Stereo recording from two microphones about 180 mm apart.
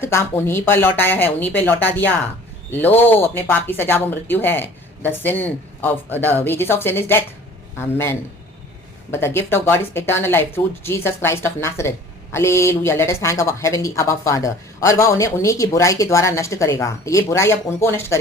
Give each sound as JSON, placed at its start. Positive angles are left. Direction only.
{"t": 0.0, "sound": "speech", "side_deg": 15}
{"t": 9.1, "sound": "speech", "side_deg": 15}